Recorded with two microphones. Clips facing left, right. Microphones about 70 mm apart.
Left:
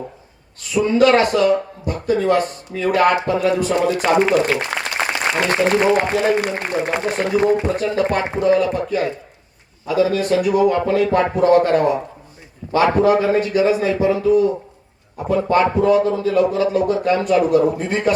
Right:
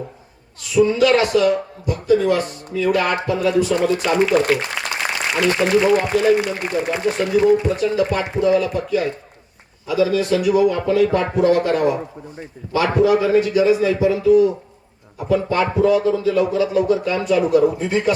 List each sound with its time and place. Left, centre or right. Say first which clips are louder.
0.7 s speech: left 1 dB; left